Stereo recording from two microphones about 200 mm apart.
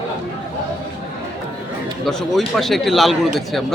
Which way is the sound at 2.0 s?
Centre (ahead or behind).